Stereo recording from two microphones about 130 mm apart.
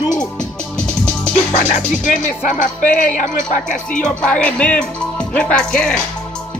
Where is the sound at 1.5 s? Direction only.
70° left (ahead or behind).